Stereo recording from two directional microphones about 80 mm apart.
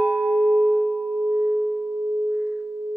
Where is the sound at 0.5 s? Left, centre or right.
Centre.